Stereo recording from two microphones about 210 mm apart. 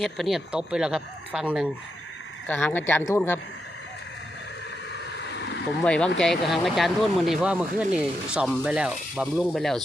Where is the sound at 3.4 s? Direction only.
70° left (ahead or behind).